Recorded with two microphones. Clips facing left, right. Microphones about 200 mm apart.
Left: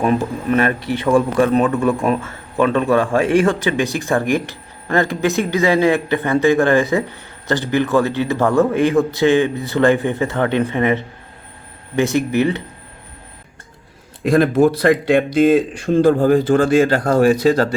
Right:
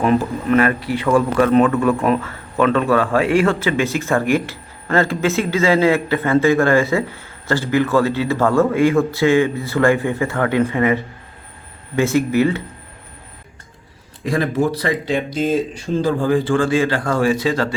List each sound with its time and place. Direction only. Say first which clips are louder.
0.0 s speech: right 1 dB; 15° left (ahead or behind)
14.3 s speech: left 6 dB; 60° left (ahead or behind)
16.0 s speech: left 5 dB; 45° left (ahead or behind)